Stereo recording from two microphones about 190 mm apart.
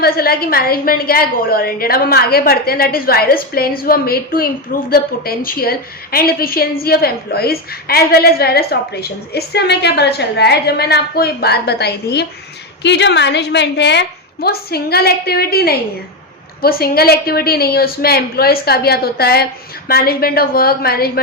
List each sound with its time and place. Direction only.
0.0 s a woman's voice: 50° left (ahead or behind)